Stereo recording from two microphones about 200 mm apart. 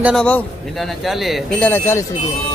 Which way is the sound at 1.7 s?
10° left (ahead or behind).